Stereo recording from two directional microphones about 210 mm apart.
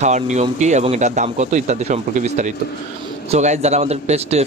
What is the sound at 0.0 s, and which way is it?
Speech, 35° right (ahead or behind).